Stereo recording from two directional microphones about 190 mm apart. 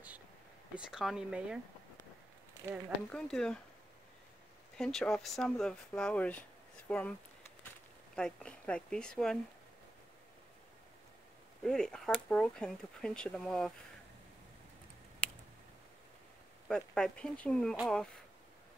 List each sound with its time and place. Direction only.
0.7 s speech: 5° right (ahead or behind)
3.1 s speech: 5° left (ahead or behind)
4.7 s speech: 5° left (ahead or behind)
8.2 s speech: 5° left (ahead or behind)
11.6 s speech: 5° left (ahead or behind)
15.2 s a sound: 5° left (ahead or behind)
16.6 s speech: 5° left (ahead or behind)